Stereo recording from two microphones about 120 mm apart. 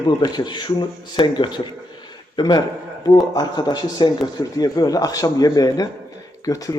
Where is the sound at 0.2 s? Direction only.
35° left (ahead or behind).